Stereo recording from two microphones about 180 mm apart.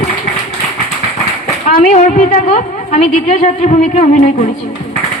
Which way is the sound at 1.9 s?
40° left (ahead or behind).